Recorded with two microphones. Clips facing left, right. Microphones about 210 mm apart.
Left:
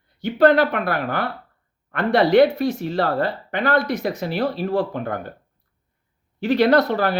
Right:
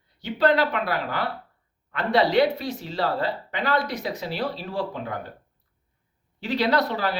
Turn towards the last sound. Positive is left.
turn(degrees=55)  # may be behind; listen again after turning